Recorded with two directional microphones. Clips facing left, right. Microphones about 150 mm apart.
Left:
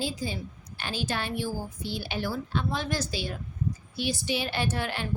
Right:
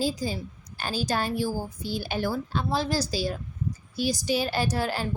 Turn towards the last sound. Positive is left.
turn(degrees=-35)  # may be behind; listen again after turning